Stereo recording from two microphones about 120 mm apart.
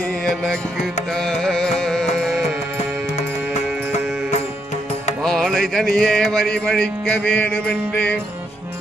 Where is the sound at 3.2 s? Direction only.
65° left (ahead or behind).